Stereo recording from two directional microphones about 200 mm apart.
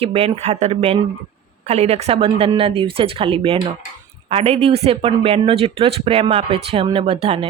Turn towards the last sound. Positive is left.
turn(degrees=-30)  # may be behind; listen again after turning